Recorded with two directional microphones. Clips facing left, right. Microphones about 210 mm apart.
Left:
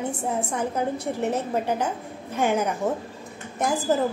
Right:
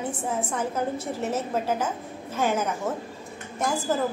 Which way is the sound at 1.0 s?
15° left (ahead or behind).